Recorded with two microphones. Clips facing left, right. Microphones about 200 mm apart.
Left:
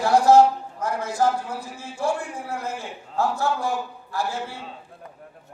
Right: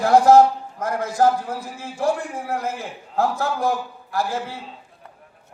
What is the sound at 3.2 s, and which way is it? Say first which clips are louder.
Speech: right 2 dB; 90° right.